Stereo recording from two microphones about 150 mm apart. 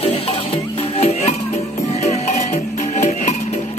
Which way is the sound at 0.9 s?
45° left (ahead or behind).